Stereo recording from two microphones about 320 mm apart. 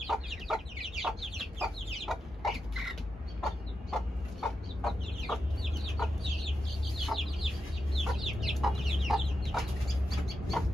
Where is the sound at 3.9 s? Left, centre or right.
Centre.